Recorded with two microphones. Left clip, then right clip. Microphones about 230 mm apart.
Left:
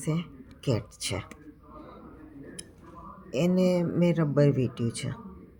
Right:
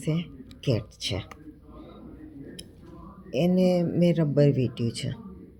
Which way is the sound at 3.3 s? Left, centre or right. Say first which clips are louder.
Right 2 dB; centre.